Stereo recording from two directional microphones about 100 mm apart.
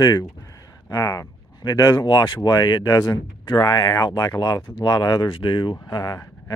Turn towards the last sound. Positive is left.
turn(degrees=40)  # may be behind; listen again after turning